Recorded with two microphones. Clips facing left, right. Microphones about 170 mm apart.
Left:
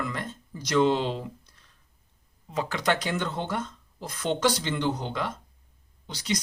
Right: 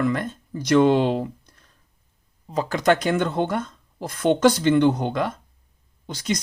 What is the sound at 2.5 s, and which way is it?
Speech, 40° right (ahead or behind).